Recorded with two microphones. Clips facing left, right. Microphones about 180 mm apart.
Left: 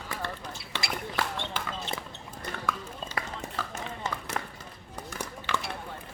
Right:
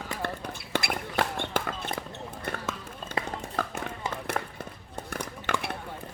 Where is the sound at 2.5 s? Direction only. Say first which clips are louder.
Right 4 dB; 55° right (ahead or behind).